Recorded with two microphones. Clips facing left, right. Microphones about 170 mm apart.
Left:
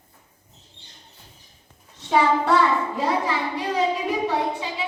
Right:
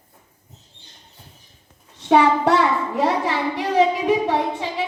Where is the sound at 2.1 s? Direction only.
65° right (ahead or behind).